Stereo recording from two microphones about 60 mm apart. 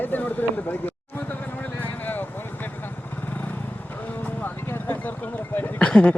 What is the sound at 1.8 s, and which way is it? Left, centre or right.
Vehicle, left.